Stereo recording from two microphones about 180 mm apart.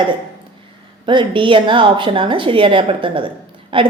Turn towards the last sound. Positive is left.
turn(degrees=-30)  # may be behind; listen again after turning